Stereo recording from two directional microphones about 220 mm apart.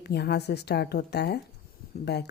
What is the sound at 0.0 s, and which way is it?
A woman's voice, 50° left (ahead or behind).